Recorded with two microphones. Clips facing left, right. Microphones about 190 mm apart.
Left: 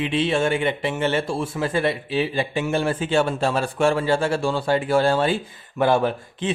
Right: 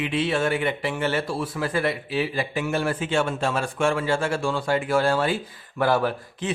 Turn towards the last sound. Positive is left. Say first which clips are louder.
# left 3 dB
turn(degrees=25)  # may be behind; listen again after turning